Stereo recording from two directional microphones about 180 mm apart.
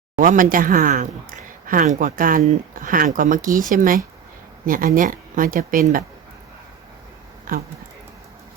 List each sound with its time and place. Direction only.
0.2 s speech: 50° right (ahead or behind)
7.5 s speech: 50° right (ahead or behind)